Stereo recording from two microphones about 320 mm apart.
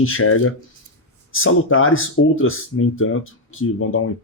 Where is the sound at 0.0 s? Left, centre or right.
Left.